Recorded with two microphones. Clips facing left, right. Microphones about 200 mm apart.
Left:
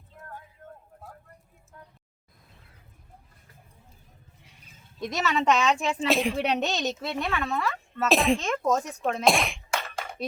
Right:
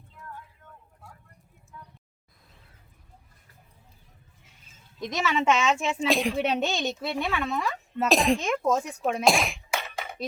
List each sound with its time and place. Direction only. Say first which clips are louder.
0.1 s a sound: even; 45° left (ahead or behind)
4.9 s a child's voice: even; centre (ahead or behind)
7.5 s speech: even; 15° right (ahead or behind)
8.0 s a child's voice: even; centre (ahead or behind)